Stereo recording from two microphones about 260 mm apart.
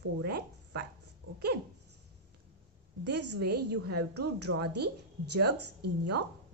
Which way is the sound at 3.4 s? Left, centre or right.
Right.